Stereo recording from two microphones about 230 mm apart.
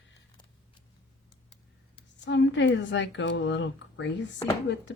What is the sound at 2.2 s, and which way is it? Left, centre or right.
Speech, left.